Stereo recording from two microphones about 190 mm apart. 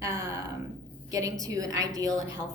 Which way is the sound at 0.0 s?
20° right (ahead or behind).